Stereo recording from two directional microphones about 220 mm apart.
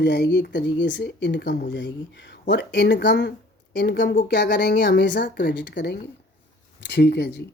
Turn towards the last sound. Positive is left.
turn(degrees=50)  # may be behind; listen again after turning